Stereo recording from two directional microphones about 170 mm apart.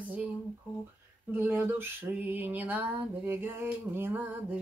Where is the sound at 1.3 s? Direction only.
15° right (ahead or behind).